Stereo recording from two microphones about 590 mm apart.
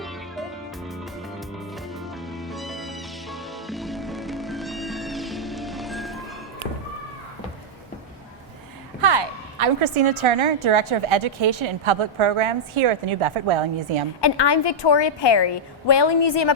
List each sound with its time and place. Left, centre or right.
2.3 s music: centre
9.0 s a woman's voice: right
14.2 s a woman's voice: left